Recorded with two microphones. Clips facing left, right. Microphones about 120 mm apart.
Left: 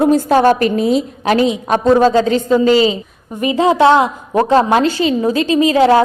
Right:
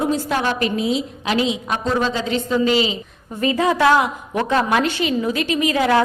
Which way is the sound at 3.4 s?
25° left (ahead or behind).